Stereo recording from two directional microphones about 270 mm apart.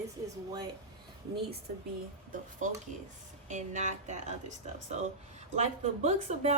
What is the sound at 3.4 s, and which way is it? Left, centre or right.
Speech, right.